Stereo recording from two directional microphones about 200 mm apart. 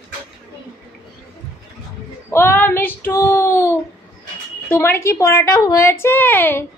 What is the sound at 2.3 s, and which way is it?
A woman's voice, 10° left (ahead or behind).